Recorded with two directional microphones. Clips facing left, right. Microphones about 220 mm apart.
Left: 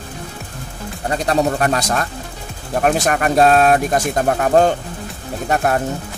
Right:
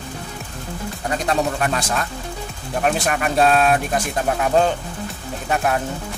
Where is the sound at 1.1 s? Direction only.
35° left (ahead or behind).